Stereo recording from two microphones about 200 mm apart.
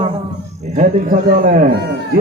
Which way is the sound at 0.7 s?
40° right (ahead or behind).